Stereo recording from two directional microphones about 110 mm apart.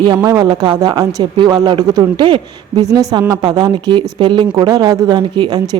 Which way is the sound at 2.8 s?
35° right (ahead or behind).